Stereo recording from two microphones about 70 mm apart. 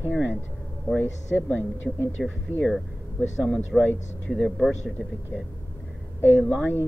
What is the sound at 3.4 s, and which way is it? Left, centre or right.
Speech, centre.